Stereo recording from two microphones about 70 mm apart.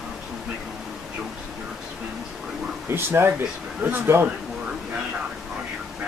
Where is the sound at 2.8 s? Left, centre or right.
Right.